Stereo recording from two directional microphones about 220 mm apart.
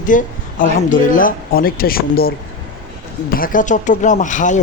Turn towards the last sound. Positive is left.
turn(degrees=35)  # may be behind; listen again after turning